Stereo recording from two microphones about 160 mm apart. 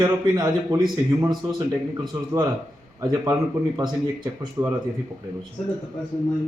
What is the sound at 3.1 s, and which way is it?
Speech, 25° right (ahead or behind).